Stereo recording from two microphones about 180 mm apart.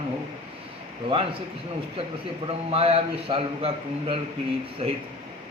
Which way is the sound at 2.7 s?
30° right (ahead or behind).